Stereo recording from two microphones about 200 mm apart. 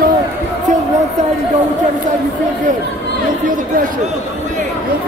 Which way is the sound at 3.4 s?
40° right (ahead or behind).